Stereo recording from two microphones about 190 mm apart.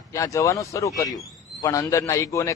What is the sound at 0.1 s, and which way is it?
A man's voice, 15° left (ahead or behind).